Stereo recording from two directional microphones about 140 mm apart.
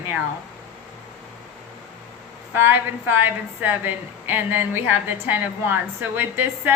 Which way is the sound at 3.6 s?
15° right (ahead or behind).